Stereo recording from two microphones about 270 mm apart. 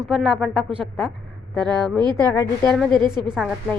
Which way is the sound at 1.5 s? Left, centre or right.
Centre.